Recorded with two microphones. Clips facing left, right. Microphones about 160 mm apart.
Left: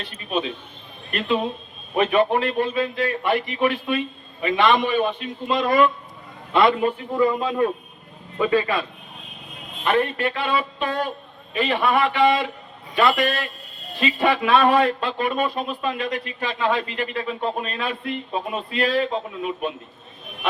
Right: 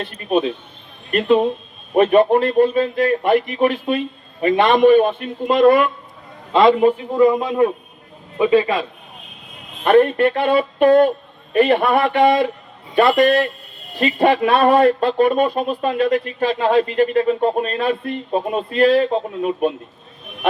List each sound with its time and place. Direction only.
0.0 s speech: 50° right (ahead or behind)
2.0 s speech: 40° right (ahead or behind); by 5.8 s 55° right (ahead or behind)
6.5 s a man's voice: 25° right (ahead or behind)
7.1 s a man's voice: 15° right (ahead or behind)
9.8 s speech: 50° right (ahead or behind)